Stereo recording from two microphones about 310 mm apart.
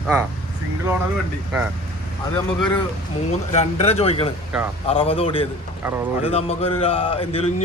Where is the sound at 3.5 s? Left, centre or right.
Left.